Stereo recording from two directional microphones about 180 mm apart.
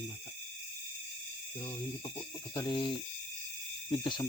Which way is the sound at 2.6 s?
25° left (ahead or behind).